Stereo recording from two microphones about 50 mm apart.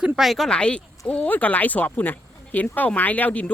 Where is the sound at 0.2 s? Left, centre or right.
Centre.